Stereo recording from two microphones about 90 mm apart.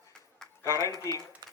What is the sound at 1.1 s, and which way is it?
Speech, 35° left (ahead or behind).